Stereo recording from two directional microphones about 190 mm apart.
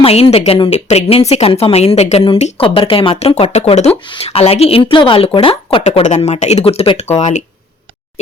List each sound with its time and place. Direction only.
0.0 s speech: 30° left (ahead or behind)